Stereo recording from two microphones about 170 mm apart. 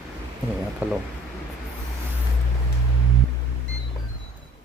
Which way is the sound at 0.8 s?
10° right (ahead or behind).